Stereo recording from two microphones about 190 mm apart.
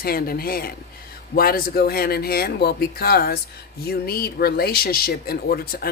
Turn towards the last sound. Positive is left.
turn(degrees=50)  # may be behind; listen again after turning